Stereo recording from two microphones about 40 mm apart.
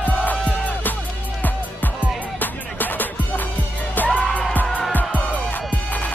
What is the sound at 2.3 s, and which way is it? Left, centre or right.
Music, left.